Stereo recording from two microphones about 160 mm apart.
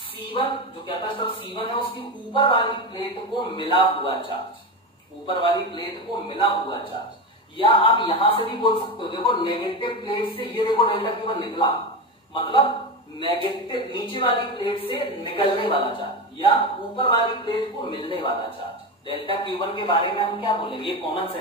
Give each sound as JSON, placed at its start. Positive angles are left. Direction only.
{"t": 0.3, "sound": "a woman's voice", "side_deg": 30}